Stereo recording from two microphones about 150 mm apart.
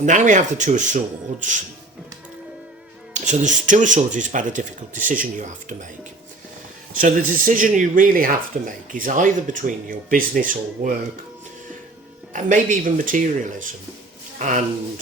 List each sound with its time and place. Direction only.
0.0 s speech: 55° right (ahead or behind)
3.1 s speech: 55° right (ahead or behind)
6.9 s speech: 65° right (ahead or behind)
12.3 s speech: 60° right (ahead or behind)